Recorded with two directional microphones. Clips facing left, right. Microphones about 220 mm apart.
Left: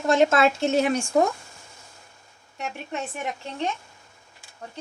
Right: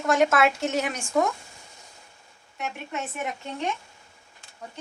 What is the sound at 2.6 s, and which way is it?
Speech, 30° left (ahead or behind).